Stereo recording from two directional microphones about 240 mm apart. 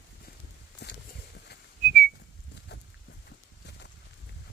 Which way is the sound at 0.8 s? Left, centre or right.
Left.